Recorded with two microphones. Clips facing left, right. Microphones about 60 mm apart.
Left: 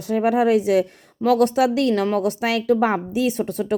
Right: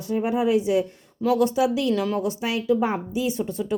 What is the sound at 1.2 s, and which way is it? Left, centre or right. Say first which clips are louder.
Speech: left 3 dB; left.